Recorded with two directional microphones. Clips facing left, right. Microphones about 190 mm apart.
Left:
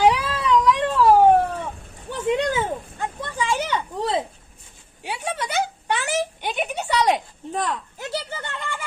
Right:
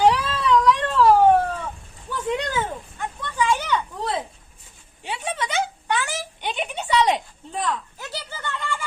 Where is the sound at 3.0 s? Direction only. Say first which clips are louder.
Right 5 dB; 30° left (ahead or behind).